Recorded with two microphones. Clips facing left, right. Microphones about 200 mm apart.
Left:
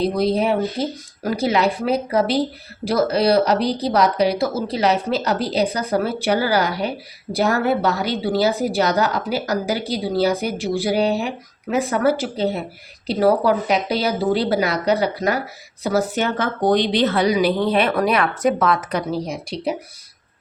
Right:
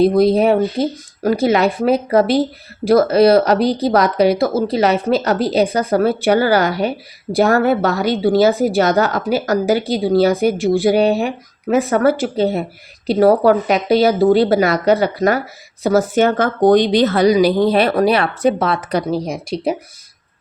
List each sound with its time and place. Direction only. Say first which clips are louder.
0.2 s a woman's voice: right 6 dB; 50° right (ahead or behind); by 19.0 s 35° right (ahead or behind)
19.5 s a woman's voice: right 6 dB; 45° right (ahead or behind)